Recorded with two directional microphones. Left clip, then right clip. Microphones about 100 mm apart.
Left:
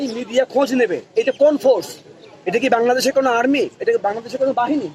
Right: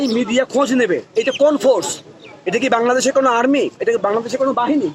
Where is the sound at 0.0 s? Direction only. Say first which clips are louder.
Right 2 dB; 25° right (ahead or behind).